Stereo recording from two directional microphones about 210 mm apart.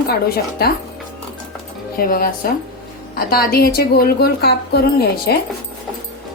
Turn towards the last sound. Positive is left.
turn(degrees=50)  # may be behind; listen again after turning